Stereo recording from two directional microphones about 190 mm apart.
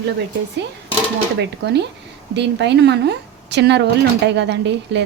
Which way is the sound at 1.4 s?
65° right (ahead or behind).